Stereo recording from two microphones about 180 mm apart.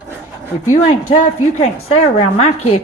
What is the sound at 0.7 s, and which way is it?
A woman's voice, 40° left (ahead or behind).